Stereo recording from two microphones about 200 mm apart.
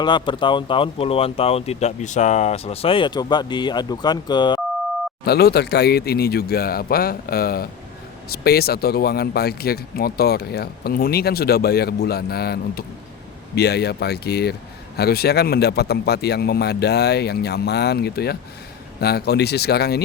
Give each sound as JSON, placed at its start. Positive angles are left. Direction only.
{"t": 0.0, "sound": "speech", "side_deg": 25}
{"t": 5.2, "sound": "speech", "side_deg": 50}